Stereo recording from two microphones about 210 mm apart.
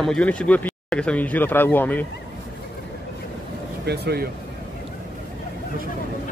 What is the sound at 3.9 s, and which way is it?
Speech, 50° right (ahead or behind).